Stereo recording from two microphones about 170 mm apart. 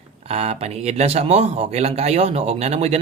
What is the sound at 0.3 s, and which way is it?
A man's voice, 35° right (ahead or behind).